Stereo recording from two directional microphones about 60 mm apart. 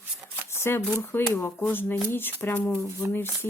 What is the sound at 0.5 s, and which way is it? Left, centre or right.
Shuffling cards, left.